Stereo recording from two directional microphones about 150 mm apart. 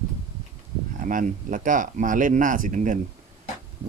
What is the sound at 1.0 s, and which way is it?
Speech, 60° right (ahead or behind).